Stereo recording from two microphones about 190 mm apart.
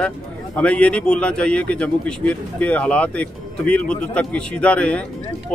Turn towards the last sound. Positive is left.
turn(degrees=5)  # may be behind; listen again after turning